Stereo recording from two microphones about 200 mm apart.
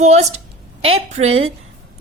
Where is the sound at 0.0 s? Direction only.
35° right (ahead or behind).